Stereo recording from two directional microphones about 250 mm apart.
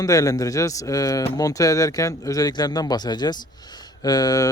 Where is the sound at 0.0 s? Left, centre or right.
Centre.